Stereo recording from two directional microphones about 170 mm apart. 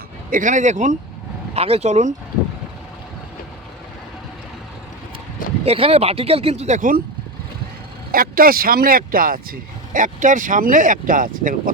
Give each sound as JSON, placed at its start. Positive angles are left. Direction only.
{"t": 0.3, "sound": "speech", "side_deg": -50}
{"t": 5.6, "sound": "speech", "side_deg": -35}
{"t": 8.1, "sound": "speech", "side_deg": -60}